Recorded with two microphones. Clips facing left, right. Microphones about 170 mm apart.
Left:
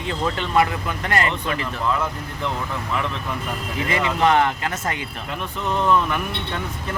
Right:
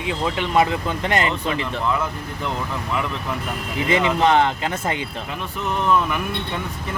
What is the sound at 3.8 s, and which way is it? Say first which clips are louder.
Speech: right 2 dB; 25° right (ahead or behind).